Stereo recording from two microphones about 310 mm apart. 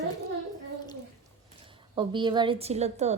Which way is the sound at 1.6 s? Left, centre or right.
Centre.